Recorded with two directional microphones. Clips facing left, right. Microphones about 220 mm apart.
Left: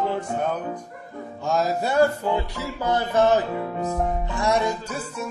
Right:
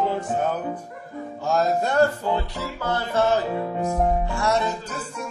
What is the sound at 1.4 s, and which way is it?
Music, 5° left (ahead or behind).